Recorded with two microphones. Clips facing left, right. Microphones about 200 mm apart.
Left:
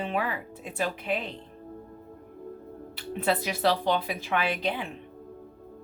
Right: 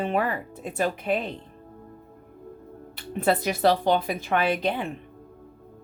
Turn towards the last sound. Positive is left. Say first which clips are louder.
# right 4 dB
turn(degrees=-50)  # may be behind; listen again after turning